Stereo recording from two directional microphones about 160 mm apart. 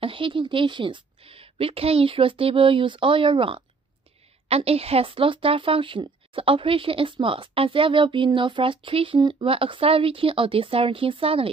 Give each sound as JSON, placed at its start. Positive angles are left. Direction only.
{"t": 0.0, "sound": "speech", "side_deg": -35}